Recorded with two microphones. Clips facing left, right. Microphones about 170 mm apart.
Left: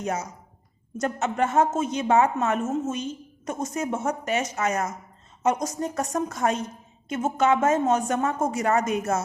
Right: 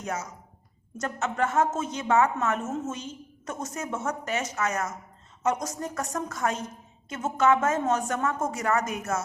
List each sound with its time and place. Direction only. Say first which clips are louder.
0.0 s a woman's voice: left 4 dB; 20° left (ahead or behind)
5.6 s a woman's voice: left 4 dB; 30° left (ahead or behind)